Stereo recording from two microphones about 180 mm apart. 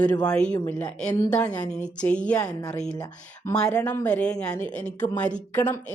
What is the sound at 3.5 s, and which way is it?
Speech, 5° left (ahead or behind).